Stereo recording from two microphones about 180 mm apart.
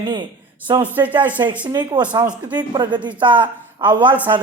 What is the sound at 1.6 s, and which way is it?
A man's voice, 25° right (ahead or behind).